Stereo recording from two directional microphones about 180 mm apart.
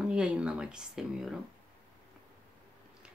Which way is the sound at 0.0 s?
5° right (ahead or behind).